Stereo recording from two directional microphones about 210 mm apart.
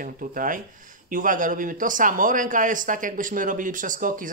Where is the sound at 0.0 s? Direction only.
40° right (ahead or behind).